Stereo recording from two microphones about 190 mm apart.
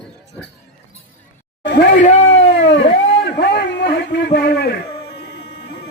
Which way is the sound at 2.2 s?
75° left (ahead or behind).